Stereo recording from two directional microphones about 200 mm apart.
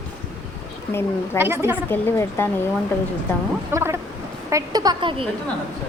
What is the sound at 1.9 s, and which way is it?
Speech, 10° left (ahead or behind).